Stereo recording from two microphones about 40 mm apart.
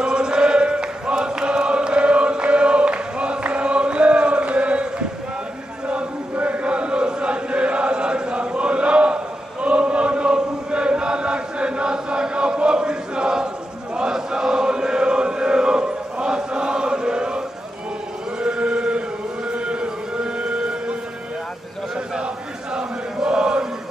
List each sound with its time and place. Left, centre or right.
0.0 s chant: centre
6.4 s chant: right
18.4 s chant: right
21.9 s a sound: right
22.8 s chant: right